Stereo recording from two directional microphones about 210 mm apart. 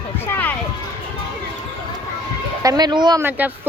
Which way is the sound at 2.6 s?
20° right (ahead or behind).